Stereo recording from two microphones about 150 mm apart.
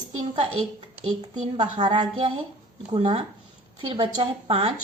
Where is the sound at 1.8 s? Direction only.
30° right (ahead or behind).